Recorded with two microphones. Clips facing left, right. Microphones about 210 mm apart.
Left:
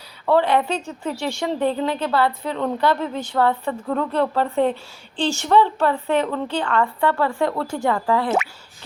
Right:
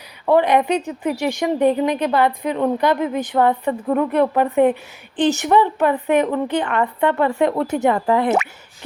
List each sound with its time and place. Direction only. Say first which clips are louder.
0.3 s a woman's voice: right 3 dB; 15° right (ahead or behind)